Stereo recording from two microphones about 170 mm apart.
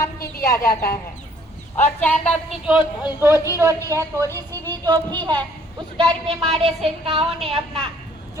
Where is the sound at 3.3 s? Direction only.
20° left (ahead or behind).